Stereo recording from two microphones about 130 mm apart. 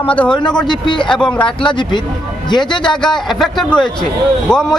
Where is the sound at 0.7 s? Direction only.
35° left (ahead or behind).